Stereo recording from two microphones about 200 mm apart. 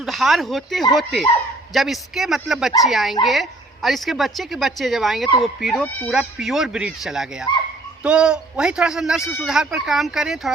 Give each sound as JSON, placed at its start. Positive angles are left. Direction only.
{"t": 0.0, "sound": "a man's voice", "side_deg": 0}